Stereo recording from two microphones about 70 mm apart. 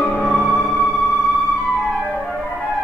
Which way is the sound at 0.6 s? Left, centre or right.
Centre.